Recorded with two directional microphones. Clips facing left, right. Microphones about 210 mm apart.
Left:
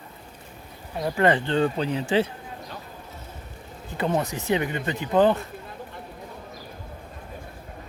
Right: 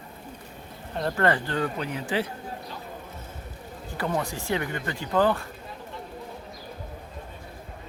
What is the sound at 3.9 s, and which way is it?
Speech, 20° left (ahead or behind).